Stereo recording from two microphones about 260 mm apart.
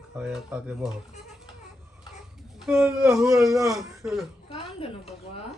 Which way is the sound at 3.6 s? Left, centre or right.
Centre.